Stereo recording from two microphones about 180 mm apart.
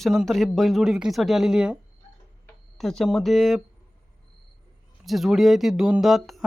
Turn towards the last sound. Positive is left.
turn(degrees=0)  # may be behind; listen again after turning